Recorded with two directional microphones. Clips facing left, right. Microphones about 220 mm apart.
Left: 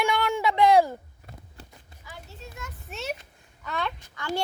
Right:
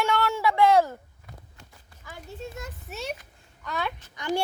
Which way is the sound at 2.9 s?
Centre (ahead or behind).